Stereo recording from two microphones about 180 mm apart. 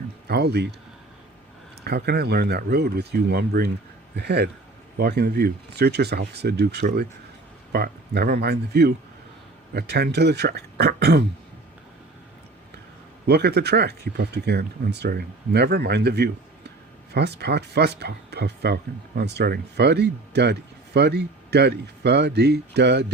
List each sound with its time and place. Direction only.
0.3 s speech: 65° right (ahead or behind)
1.8 s speech: 65° right (ahead or behind)
13.2 s speech: 65° right (ahead or behind)